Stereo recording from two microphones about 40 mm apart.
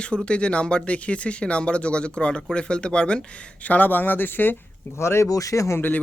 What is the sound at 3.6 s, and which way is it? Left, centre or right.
Speech, left.